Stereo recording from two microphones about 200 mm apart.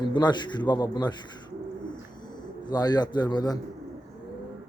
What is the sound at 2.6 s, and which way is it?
Speech, 20° left (ahead or behind).